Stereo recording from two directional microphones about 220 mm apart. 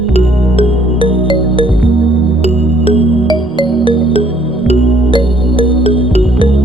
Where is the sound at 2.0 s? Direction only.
25° right (ahead or behind).